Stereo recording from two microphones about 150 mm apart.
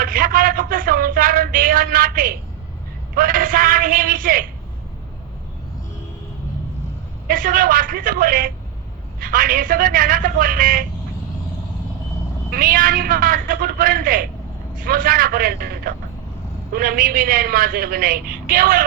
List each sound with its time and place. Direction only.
0.0 s a sound: 75° right (ahead or behind)
3.2 s a woman's voice: 70° right (ahead or behind)
7.3 s a woman's voice: 70° right (ahead or behind)
12.5 s a woman's voice: 75° right (ahead or behind)
16.7 s a woman's voice: 75° right (ahead or behind)